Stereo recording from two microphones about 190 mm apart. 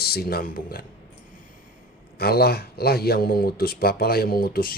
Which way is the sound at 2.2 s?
55° left (ahead or behind).